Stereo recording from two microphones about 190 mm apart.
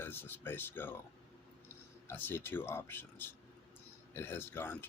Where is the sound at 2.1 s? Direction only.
10° left (ahead or behind).